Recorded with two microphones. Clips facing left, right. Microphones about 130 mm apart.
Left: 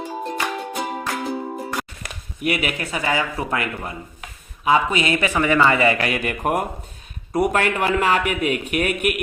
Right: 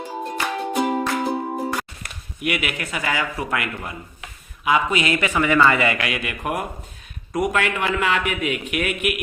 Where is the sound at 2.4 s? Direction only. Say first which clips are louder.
Left 2 dB; 35° left (ahead or behind).